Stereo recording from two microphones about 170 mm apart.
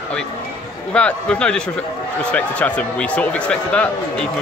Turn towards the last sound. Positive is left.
turn(degrees=5)  # may be behind; listen again after turning